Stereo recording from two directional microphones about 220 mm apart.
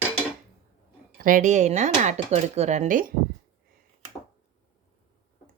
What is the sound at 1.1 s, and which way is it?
Speech, 40° right (ahead or behind).